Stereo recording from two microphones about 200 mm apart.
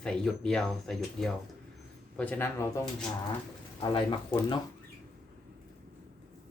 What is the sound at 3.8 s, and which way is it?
Speech, 25° left (ahead or behind).